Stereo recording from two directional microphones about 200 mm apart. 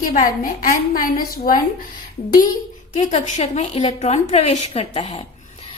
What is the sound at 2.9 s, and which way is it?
A woman's voice, 35° left (ahead or behind).